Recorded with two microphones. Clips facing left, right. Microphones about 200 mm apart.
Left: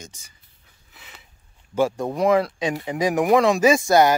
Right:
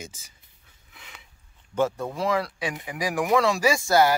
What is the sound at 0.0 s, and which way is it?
Speech, 5° right (ahead or behind).